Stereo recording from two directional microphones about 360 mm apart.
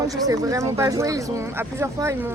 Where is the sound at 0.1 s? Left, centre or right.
Centre.